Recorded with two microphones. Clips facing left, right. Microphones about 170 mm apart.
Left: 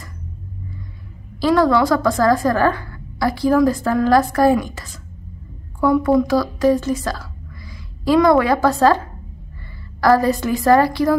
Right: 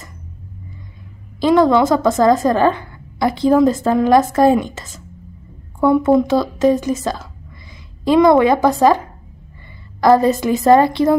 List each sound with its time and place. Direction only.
1.4 s a woman's voice: 20° right (ahead or behind)